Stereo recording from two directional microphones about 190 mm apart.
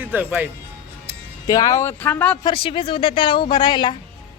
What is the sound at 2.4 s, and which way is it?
Speech, 25° left (ahead or behind).